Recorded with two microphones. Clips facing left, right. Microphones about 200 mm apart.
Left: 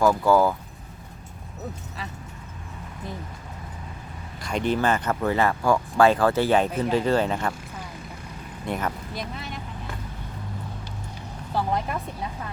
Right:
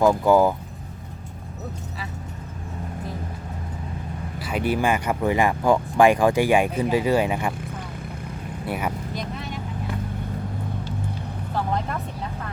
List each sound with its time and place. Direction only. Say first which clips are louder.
0.0 s speech: right 2 dB; 20° right (ahead or behind)
4.4 s speech: even; 5° right (ahead or behind)
8.6 s speech: even; 10° right (ahead or behind)
11.5 s speech: even; 10° left (ahead or behind)